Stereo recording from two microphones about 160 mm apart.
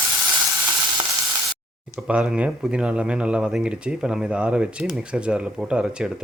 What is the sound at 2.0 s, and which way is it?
Speech, 5° right (ahead or behind).